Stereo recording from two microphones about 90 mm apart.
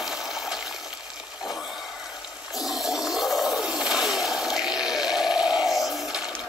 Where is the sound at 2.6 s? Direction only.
5° right (ahead or behind).